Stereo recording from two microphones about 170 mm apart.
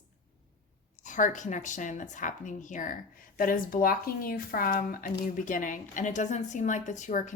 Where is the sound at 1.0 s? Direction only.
50° left (ahead or behind).